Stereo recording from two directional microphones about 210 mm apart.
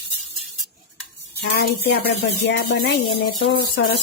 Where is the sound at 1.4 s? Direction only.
50° left (ahead or behind).